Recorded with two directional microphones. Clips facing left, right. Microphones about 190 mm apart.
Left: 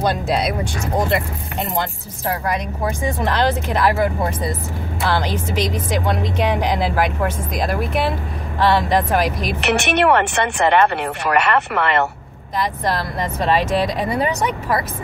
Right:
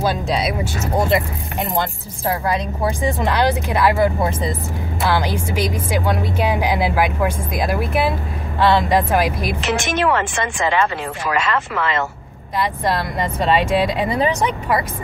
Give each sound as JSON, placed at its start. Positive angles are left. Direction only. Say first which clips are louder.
{"t": 0.0, "sound": "speech", "louder": "left 1 dB", "side_deg": 0}
{"t": 0.9, "sound": "speech", "louder": "right 2 dB", "side_deg": -15}
{"t": 3.2, "sound": "speech", "louder": "left 1 dB", "side_deg": -15}
{"t": 9.6, "sound": "speech", "louder": "left 5 dB", "side_deg": 65}
{"t": 13.4, "sound": "speech", "louder": "right 1 dB", "side_deg": -10}